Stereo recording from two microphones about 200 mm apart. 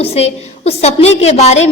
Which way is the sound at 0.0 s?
30° left (ahead or behind).